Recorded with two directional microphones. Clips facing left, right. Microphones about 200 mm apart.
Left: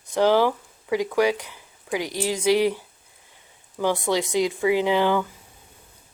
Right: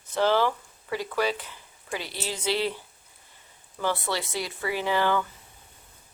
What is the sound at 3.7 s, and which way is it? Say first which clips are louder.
Speech: left 6 dB; 15° left (ahead or behind).